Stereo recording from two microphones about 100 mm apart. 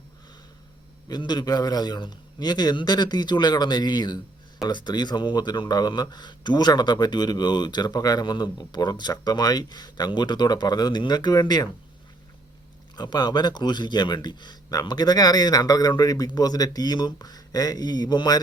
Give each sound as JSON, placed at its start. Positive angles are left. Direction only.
{"t": 1.2, "sound": "speech", "side_deg": 45}
{"t": 13.0, "sound": "speech", "side_deg": 45}